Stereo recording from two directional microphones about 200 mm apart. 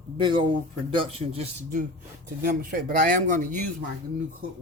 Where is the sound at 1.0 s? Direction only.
30° right (ahead or behind).